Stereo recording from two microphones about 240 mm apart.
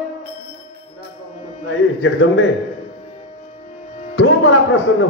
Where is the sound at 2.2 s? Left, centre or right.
Left.